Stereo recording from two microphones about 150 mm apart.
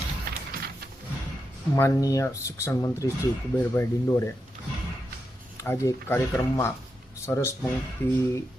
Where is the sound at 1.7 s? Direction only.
20° left (ahead or behind).